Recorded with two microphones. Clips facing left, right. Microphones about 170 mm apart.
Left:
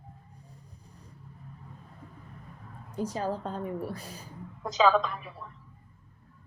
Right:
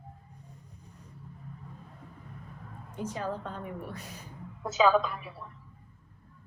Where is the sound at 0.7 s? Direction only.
35° left (ahead or behind).